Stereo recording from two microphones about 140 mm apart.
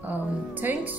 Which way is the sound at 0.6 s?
15° right (ahead or behind).